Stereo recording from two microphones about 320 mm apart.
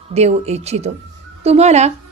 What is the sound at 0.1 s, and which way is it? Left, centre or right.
A woman's voice, centre.